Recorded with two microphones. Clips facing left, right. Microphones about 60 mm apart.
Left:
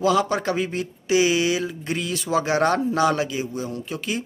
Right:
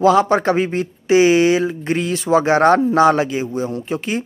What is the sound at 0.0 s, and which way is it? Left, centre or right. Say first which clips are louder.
Speech: right 7 dB; right.